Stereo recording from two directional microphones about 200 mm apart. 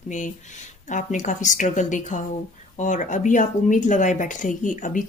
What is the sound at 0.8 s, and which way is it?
Speech, 40° left (ahead or behind).